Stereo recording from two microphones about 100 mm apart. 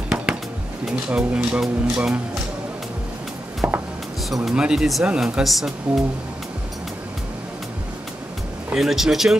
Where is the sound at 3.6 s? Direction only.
15° right (ahead or behind).